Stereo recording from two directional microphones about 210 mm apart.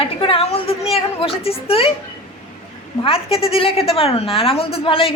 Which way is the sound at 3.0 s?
25° left (ahead or behind).